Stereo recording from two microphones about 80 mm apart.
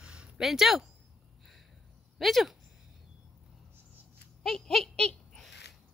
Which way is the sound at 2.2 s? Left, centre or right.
Centre.